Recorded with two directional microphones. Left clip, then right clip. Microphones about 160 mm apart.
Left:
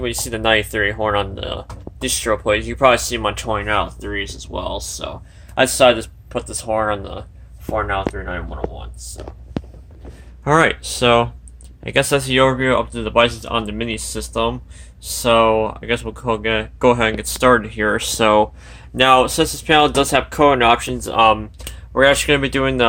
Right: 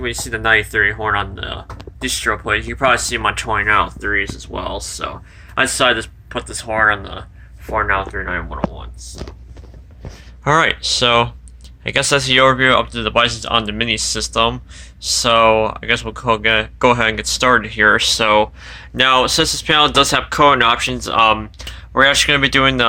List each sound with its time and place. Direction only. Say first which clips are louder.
0.0 s speech: right 1 dB; 30° left (ahead or behind)
4.5 s speech: even; 10° right (ahead or behind)
5.5 s speech: left 2 dB; 30° left (ahead or behind)
7.8 s speech: right 4 dB; 15° left (ahead or behind)
10.4 s speech: right 1 dB; 5° left (ahead or behind); by 18.4 s 30° left (ahead or behind)
18.6 s speech: even; 15° left (ahead or behind)